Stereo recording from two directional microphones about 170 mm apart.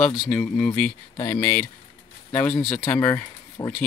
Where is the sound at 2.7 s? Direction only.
10° left (ahead or behind).